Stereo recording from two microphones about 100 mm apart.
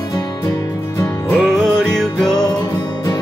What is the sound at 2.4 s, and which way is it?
Music, 45° left (ahead or behind).